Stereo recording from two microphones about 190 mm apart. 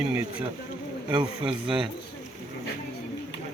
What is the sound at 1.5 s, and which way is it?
Speech, 25° right (ahead or behind).